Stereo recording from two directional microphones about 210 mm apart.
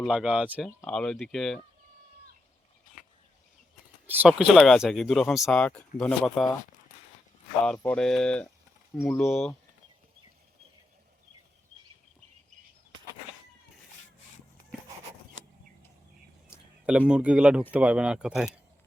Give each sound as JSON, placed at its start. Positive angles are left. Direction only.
{"t": 0.0, "sound": "speech", "side_deg": -5}
{"t": 4.0, "sound": "speech", "side_deg": -5}
{"t": 7.8, "sound": "speech", "side_deg": 5}
{"t": 16.5, "sound": "a sound", "side_deg": -5}
{"t": 17.1, "sound": "speech", "side_deg": -5}